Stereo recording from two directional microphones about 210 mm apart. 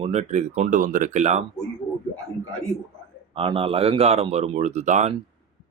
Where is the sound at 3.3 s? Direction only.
25° right (ahead or behind).